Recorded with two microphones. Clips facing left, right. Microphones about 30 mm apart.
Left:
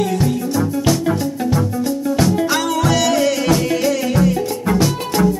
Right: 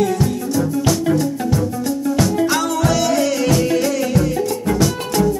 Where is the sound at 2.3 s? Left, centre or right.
Centre.